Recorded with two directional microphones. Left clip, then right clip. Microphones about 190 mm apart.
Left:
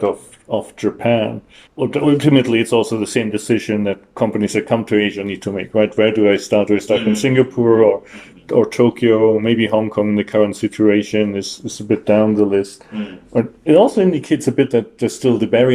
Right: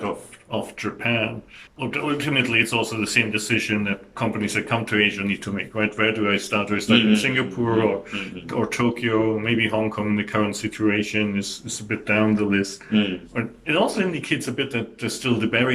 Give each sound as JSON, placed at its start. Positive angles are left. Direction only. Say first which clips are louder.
{"t": 0.5, "sound": "speech", "louder": "left 8 dB", "side_deg": 40}